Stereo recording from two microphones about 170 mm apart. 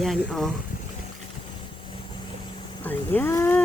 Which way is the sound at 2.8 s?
10° left (ahead or behind).